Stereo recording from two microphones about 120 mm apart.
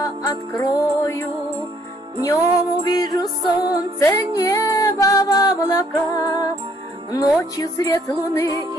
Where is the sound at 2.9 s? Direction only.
30° left (ahead or behind).